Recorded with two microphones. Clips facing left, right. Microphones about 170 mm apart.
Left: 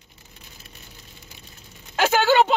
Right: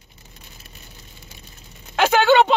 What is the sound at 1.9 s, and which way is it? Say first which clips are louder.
Speech: right 3 dB; 65° right (ahead or behind).